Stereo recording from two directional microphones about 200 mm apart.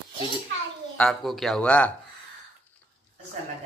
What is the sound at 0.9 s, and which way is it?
Speech, centre (ahead or behind).